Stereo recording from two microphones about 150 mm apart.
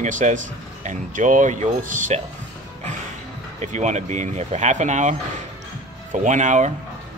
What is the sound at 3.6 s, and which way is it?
Speech, 50° right (ahead or behind).